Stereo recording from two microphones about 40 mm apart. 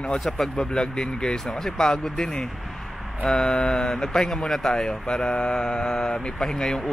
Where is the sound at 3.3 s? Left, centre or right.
Left.